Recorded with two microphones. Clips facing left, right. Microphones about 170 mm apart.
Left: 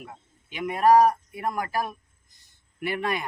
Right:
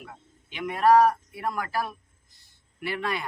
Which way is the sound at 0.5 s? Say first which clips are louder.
Left 1 dB; 10° left (ahead or behind).